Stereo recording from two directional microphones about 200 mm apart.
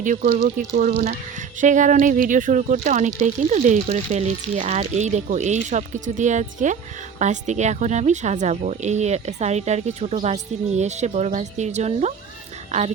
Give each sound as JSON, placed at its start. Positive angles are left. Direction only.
{"t": 0.0, "sound": "speech", "side_deg": -40}